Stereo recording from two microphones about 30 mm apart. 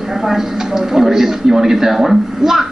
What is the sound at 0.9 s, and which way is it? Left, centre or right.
Speech, centre.